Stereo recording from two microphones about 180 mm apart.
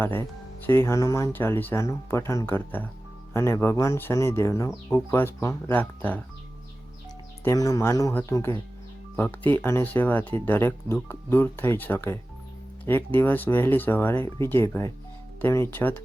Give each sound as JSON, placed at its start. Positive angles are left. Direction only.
{"t": 0.0, "sound": "speech", "side_deg": 10}
{"t": 4.7, "sound": "speech", "side_deg": -5}
{"t": 5.1, "sound": "speech", "side_deg": 15}
{"t": 7.4, "sound": "speech", "side_deg": 20}